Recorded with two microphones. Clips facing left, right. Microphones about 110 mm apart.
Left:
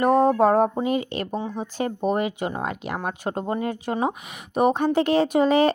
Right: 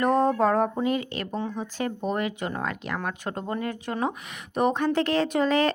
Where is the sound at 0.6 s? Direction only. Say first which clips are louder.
Left 3 dB; 20° left (ahead or behind).